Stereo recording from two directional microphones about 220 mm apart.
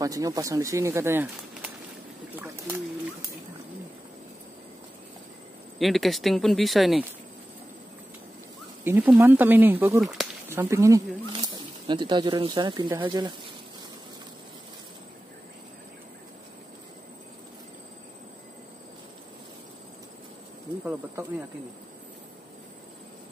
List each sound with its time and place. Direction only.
0.0 s speech: 15° right (ahead or behind)
2.3 s pigeon: 10° right (ahead or behind)
5.8 s speech: centre (ahead or behind)
8.8 s speech: 10° right (ahead or behind)